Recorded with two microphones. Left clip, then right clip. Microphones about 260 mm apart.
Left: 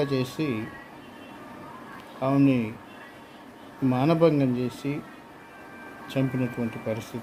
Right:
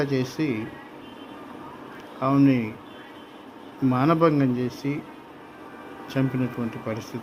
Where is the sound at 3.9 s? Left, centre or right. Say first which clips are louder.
Right 1 dB; centre.